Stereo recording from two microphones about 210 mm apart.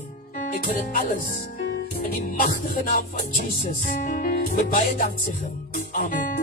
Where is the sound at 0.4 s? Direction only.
40° left (ahead or behind).